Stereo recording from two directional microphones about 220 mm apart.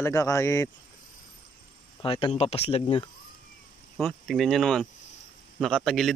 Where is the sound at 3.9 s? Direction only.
Centre (ahead or behind).